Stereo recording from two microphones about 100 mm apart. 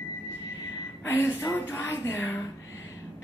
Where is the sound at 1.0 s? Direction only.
20° left (ahead or behind).